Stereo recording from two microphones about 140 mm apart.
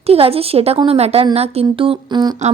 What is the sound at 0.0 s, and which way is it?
A woman's voice, 45° right (ahead or behind).